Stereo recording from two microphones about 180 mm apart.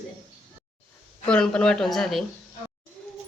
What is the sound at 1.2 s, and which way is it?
Speech, 5° left (ahead or behind).